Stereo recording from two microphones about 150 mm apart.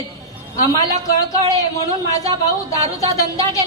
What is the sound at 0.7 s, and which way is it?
A man's voice, 25° left (ahead or behind).